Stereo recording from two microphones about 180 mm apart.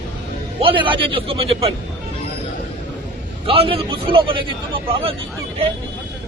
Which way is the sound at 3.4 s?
30° right (ahead or behind).